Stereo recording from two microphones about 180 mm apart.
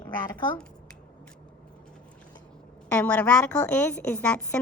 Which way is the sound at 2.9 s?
10° left (ahead or behind).